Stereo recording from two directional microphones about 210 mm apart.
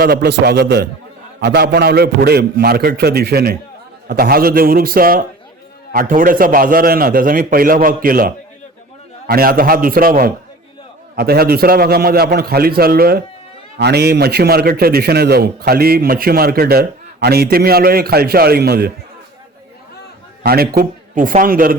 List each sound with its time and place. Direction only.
0.0 s a man's voice: 50° right (ahead or behind)
20.4 s a man's voice: 45° right (ahead or behind)